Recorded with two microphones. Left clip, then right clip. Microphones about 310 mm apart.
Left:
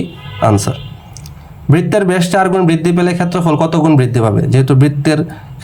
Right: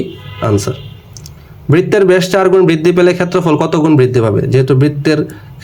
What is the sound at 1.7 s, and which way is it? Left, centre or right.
A man's voice, centre.